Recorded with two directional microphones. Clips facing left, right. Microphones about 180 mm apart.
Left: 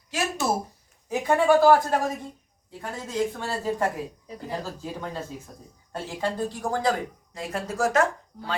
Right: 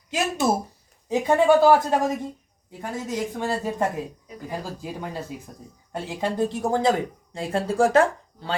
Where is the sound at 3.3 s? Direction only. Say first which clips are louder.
Right 2 dB; 15° right (ahead or behind).